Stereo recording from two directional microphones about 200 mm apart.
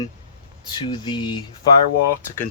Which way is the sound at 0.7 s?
20° left (ahead or behind).